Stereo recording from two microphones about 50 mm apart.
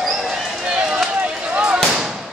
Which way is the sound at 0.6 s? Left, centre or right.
Centre.